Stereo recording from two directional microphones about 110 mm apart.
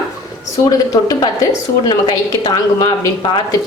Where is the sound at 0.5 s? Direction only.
35° left (ahead or behind).